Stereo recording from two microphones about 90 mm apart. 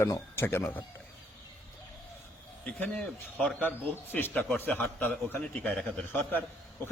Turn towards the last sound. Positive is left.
turn(degrees=20)  # may be behind; listen again after turning